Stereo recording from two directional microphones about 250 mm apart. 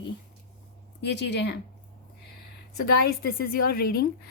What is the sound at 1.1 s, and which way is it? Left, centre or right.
Speech, left.